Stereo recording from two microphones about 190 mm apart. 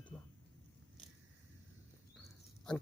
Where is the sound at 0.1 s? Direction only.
10° left (ahead or behind).